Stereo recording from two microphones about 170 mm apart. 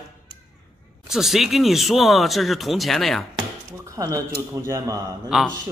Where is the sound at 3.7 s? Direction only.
15° right (ahead or behind).